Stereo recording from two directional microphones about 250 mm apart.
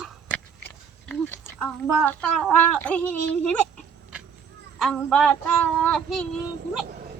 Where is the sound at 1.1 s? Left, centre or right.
Centre.